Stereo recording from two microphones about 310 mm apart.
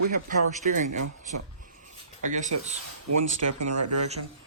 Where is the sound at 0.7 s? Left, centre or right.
Right.